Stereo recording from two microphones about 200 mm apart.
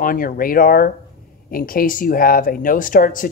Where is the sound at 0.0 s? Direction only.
45° left (ahead or behind).